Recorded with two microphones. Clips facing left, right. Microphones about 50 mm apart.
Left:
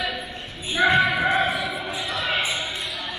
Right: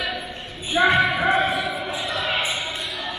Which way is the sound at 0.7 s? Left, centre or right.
Right.